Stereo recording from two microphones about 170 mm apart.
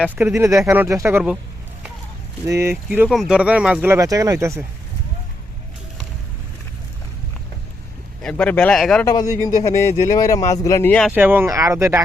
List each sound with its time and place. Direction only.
0.0 s speech: 10° right (ahead or behind)
2.5 s speech: 15° right (ahead or behind)
3.1 s speech: centre (ahead or behind)
8.2 s speech: 5° left (ahead or behind)
9.0 s speech: 20° left (ahead or behind)
11.1 s speech: 10° right (ahead or behind)